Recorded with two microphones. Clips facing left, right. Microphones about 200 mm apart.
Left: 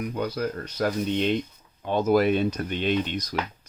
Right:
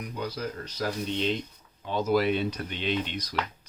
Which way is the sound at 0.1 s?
55° left (ahead or behind).